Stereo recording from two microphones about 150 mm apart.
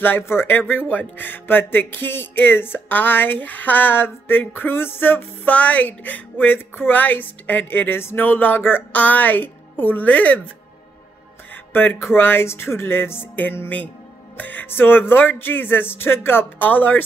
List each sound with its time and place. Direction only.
0.0 s speech: 15° left (ahead or behind)
11.5 s speech: 15° left (ahead or behind)